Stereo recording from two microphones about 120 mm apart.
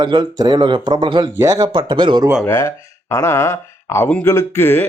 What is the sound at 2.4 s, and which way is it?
Speech, 20° left (ahead or behind).